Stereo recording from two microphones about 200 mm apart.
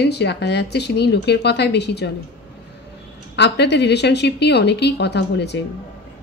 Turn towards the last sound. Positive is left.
turn(degrees=55)  # may be behind; listen again after turning